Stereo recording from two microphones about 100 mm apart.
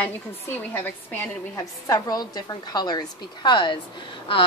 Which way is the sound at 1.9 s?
35° left (ahead or behind).